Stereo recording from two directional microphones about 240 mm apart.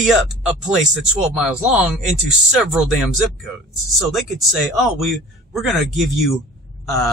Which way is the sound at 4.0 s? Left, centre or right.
Centre.